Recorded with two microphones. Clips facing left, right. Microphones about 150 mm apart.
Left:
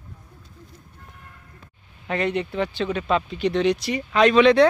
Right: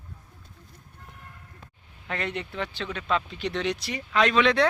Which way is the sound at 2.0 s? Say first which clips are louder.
Left 8 dB; 10° left (ahead or behind).